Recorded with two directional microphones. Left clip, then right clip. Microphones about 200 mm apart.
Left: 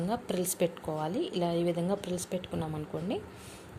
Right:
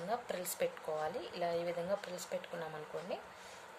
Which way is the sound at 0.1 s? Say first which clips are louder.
Left 4 dB; 35° left (ahead or behind).